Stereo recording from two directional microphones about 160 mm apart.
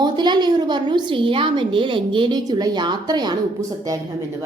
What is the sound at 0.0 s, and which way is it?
A woman's voice, 25° right (ahead or behind).